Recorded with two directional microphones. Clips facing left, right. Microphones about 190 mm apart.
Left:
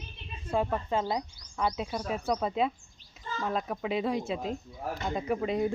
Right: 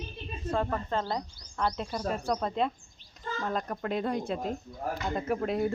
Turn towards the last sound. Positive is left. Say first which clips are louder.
# even
turn(degrees=0)  # may be behind; listen again after turning